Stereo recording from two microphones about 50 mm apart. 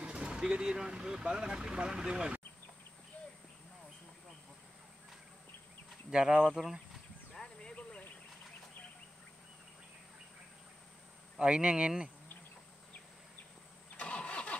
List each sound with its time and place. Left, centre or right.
0.0 s a sound: right
0.3 s speech: centre
6.0 s speech: centre
6.5 s speech: centre
7.3 s a sound: centre
11.3 s speech: centre
13.9 s vehicle: left